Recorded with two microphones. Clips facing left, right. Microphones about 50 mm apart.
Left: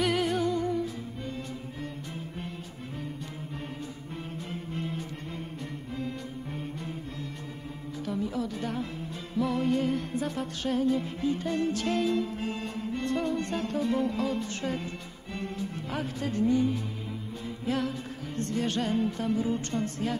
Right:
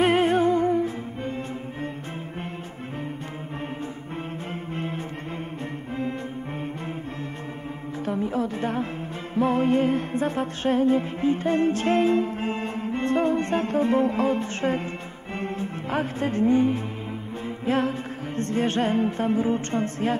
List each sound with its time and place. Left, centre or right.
0.0 s music: right
4.7 s music: right
8.0 s speech: right
9.3 s music: right